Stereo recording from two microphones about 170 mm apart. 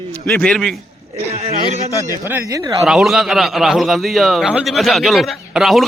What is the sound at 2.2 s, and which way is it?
Speech, 15° right (ahead or behind).